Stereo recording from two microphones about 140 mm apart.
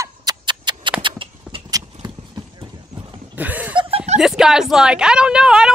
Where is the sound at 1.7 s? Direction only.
30° right (ahead or behind).